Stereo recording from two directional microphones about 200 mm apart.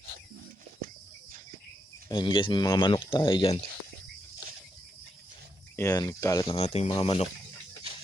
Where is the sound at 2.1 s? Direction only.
25° left (ahead or behind).